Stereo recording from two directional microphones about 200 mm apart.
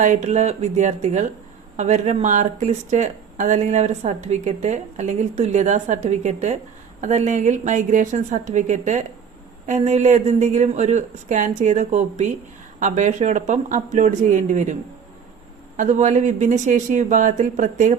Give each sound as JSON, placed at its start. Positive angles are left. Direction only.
{"t": 0.0, "sound": "speech", "side_deg": -35}
{"t": 15.8, "sound": "speech", "side_deg": -35}